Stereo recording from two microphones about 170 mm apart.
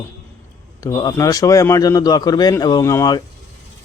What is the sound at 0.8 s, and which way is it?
Speech, 25° left (ahead or behind).